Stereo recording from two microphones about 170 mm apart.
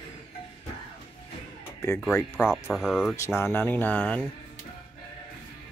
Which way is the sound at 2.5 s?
Centre (ahead or behind).